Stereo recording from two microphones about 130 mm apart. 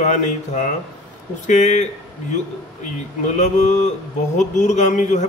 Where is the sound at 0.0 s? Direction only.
65° left (ahead or behind).